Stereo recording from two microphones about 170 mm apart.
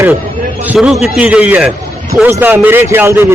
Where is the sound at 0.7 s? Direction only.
5° right (ahead or behind).